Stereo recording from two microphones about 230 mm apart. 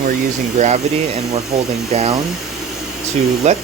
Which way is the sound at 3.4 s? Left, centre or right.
Right.